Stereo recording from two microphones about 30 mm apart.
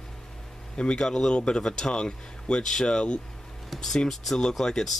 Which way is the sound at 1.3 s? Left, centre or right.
Left.